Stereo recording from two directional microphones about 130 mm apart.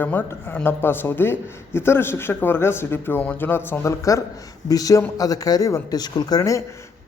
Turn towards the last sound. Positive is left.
turn(degrees=25)  # may be behind; listen again after turning